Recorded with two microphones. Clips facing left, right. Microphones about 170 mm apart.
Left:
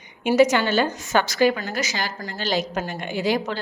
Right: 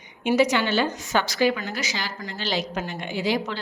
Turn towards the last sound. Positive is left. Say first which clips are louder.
# left 2 dB
turn(degrees=45)  # may be behind; listen again after turning